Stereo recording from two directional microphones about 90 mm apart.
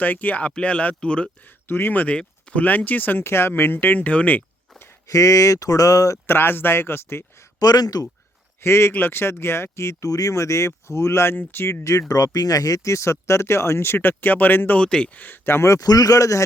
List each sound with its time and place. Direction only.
0.0 s speech: 20° left (ahead or behind)
1.6 s speech: 25° left (ahead or behind)
5.0 s speech: 40° left (ahead or behind)
6.2 s speech: 25° left (ahead or behind)
7.6 s speech: 45° left (ahead or behind)
8.6 s speech: 30° left (ahead or behind)
14.8 s speech: 10° left (ahead or behind); by 16.4 s 40° left (ahead or behind)